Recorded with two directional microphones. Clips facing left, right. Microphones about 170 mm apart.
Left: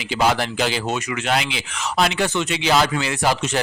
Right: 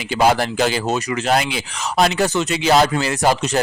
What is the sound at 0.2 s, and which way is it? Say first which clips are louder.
Speech: right 4 dB; 45° right (ahead or behind).